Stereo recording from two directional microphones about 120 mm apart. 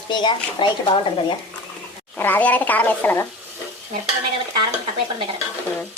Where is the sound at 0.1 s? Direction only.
40° left (ahead or behind).